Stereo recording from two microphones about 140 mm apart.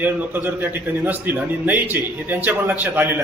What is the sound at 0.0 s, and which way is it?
A man's voice, 15° right (ahead or behind).